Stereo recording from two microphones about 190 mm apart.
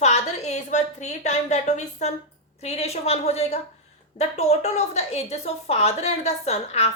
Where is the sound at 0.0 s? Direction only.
35° left (ahead or behind).